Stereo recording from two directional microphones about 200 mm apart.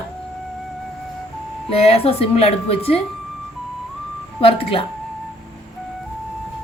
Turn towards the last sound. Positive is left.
turn(degrees=30)  # may be behind; listen again after turning